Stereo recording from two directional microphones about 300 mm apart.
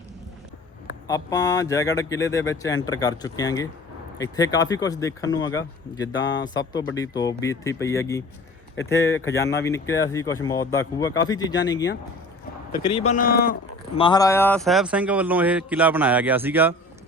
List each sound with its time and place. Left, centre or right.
1.0 s speech: centre
12.8 s speech: centre
13.9 s speech: centre